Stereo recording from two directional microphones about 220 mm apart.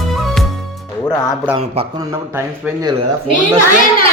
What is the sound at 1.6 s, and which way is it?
Speech, 25° right (ahead or behind).